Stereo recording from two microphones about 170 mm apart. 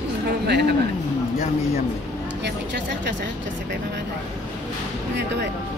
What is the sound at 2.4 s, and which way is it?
Speech, 90° right.